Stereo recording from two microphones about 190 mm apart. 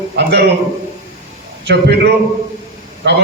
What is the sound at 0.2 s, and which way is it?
Speech, 60° right (ahead or behind).